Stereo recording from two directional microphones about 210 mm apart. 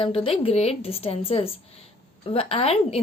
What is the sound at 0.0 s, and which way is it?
Speech, 25° left (ahead or behind).